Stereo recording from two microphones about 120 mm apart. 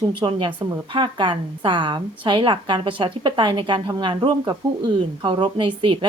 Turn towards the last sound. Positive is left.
turn(degrees=-45)  # may be behind; listen again after turning